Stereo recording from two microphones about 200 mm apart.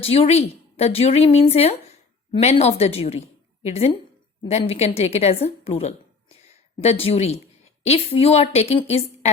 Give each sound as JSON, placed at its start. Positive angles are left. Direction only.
{"t": 0.0, "sound": "a woman's voice", "side_deg": 30}